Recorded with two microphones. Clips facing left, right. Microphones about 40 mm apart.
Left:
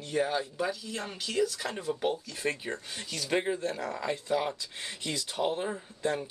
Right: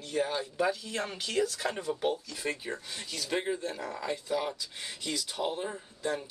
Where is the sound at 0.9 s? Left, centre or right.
Right.